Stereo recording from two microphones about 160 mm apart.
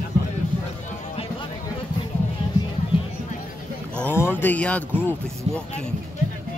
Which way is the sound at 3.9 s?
10° left (ahead or behind).